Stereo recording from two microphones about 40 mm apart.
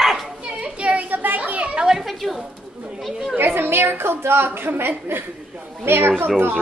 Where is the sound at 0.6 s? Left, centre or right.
Right.